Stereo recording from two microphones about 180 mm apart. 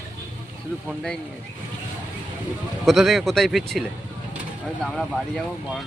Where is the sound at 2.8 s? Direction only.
Centre (ahead or behind).